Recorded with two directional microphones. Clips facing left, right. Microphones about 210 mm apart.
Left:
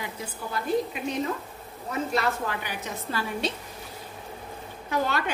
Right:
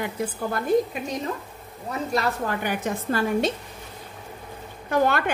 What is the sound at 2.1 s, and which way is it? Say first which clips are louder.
A woman's voice: right 4 dB; 50° right (ahead or behind).